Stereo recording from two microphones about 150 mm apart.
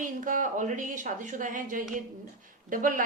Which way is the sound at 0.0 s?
60° right (ahead or behind).